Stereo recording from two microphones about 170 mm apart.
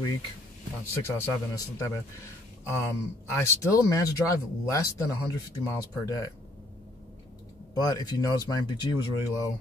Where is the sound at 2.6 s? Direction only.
15° left (ahead or behind).